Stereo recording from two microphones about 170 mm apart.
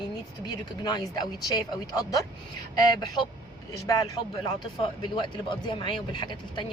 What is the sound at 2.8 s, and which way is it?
A woman's voice, 25° left (ahead or behind).